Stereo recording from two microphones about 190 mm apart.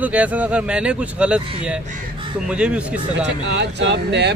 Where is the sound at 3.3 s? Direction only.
65° right (ahead or behind).